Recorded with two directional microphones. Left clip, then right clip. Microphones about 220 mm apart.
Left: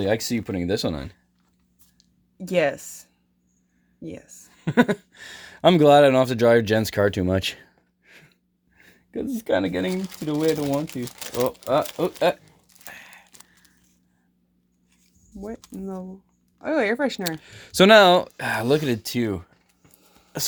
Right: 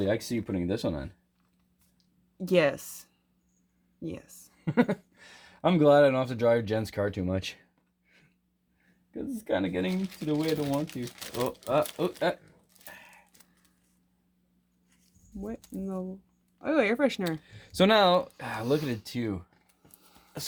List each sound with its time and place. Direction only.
0.1 s speech: 50° left (ahead or behind)
2.4 s speech: 5° right (ahead or behind)
4.5 s speech: 30° left (ahead or behind)
10.8 s speech: 25° left (ahead or behind)
11.6 s speech: 40° left (ahead or behind)
12.8 s a sound: 40° left (ahead or behind)
15.4 s speech: 5° right (ahead or behind)
17.2 s speech: 30° left (ahead or behind); by 19.5 s 45° left (ahead or behind)
20.0 s a sound: 10° right (ahead or behind)